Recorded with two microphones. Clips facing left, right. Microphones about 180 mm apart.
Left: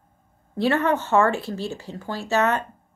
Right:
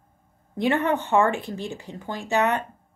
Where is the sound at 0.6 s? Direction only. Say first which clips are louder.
Left 1 dB; 15° right (ahead or behind).